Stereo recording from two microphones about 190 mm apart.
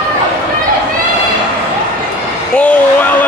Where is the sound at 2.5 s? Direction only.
5° left (ahead or behind).